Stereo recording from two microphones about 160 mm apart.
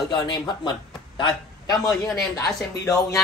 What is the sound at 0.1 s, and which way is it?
Speech, 30° left (ahead or behind).